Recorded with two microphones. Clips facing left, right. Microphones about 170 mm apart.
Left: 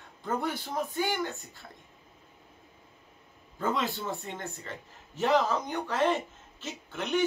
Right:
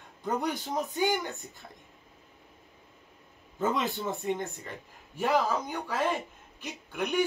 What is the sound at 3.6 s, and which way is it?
A man's voice, 20° right (ahead or behind).